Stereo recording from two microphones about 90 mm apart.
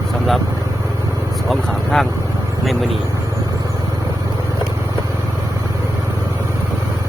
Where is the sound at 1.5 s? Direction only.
Centre (ahead or behind).